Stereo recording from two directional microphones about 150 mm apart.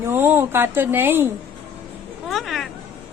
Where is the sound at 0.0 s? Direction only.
15° right (ahead or behind).